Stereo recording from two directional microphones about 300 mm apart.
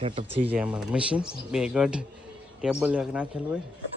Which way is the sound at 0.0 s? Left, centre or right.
Centre.